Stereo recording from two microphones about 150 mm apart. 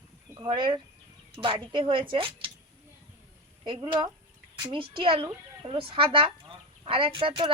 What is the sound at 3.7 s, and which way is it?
A woman's voice, 35° right (ahead or behind).